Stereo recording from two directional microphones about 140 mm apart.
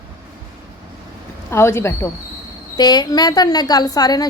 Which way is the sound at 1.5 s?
20° left (ahead or behind).